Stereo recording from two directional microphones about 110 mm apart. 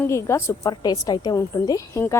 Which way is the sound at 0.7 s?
40° left (ahead or behind).